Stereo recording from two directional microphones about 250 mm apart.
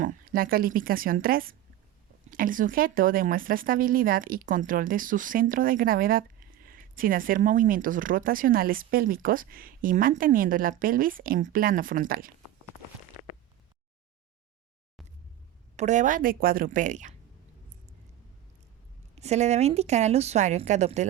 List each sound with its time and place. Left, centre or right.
0.0 s speech: right
15.7 s speech: right
19.1 s speech: right